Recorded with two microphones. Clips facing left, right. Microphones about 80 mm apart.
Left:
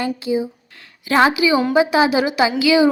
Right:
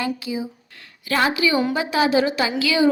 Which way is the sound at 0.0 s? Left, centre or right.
Left.